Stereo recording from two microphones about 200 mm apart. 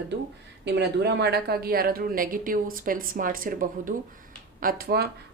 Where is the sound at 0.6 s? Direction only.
55° right (ahead or behind).